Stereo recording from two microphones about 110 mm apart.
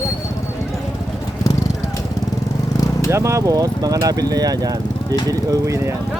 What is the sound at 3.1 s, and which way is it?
Speech, 25° right (ahead or behind).